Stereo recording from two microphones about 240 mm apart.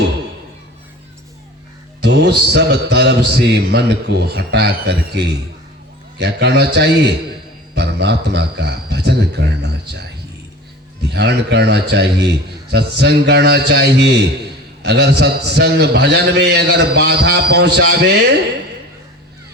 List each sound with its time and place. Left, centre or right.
2.0 s mantra: right
11.1 s mantra: right